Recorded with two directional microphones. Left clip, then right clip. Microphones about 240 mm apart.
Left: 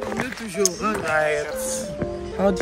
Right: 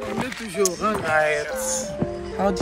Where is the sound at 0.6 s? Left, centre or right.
Centre.